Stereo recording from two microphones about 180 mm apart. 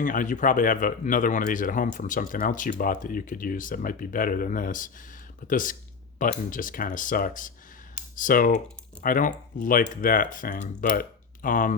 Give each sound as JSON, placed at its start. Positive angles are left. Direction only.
{"t": 0.0, "sound": "speech", "side_deg": 45}